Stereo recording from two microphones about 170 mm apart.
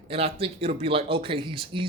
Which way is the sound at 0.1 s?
35° right (ahead or behind).